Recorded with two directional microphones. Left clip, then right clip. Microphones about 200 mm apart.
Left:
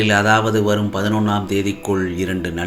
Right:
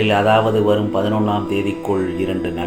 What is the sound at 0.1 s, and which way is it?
Speech, 50° left (ahead or behind).